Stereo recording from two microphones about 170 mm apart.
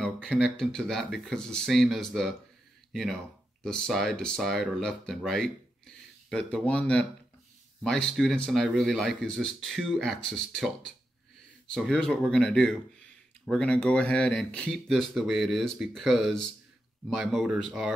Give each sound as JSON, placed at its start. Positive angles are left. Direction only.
{"t": 0.0, "sound": "speech", "side_deg": 0}
{"t": 11.7, "sound": "speech", "side_deg": 0}